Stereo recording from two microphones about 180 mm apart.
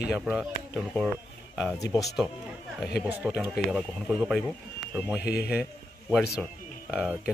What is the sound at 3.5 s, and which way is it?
Speech, centre (ahead or behind).